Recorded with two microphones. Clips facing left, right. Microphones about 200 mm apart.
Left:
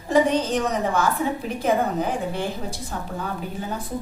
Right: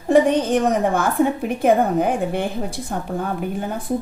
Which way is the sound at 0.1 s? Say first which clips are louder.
Right 4 dB; 55° right (ahead or behind).